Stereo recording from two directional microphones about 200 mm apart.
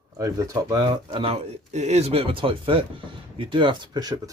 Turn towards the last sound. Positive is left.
turn(degrees=-20)  # may be behind; listen again after turning